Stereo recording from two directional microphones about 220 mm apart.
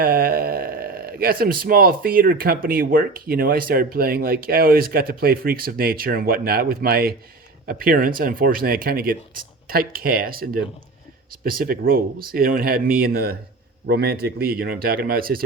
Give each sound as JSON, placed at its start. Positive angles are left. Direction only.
{"t": 0.0, "sound": "speech", "side_deg": -40}